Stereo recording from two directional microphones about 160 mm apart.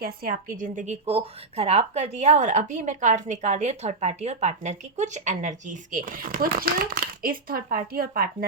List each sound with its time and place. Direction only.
0.0 s a woman's voice: 65° right (ahead or behind)